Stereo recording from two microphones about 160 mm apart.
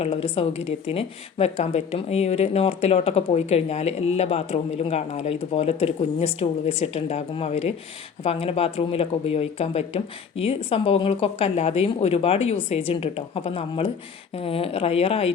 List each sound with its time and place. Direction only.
0.0 s a woman's voice: 35° left (ahead or behind)